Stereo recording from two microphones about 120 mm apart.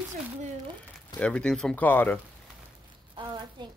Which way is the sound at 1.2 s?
10° left (ahead or behind).